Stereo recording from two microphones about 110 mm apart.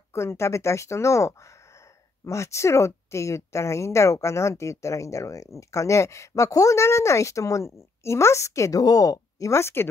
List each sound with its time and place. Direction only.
0.1 s a woman's voice: 25° left (ahead or behind)